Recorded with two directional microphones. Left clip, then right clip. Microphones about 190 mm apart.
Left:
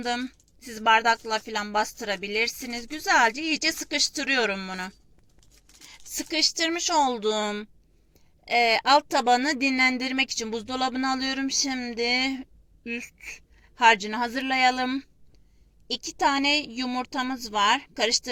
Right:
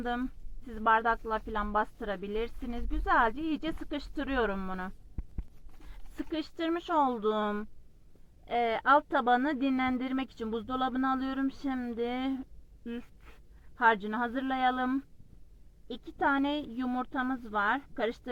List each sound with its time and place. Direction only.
0.0 s a woman's voice: 20° left (ahead or behind)
6.1 s a woman's voice: 15° left (ahead or behind)
13.8 s a woman's voice: 20° left (ahead or behind)